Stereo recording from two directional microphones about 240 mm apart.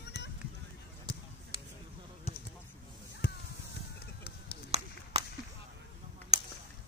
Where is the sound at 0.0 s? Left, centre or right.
Left.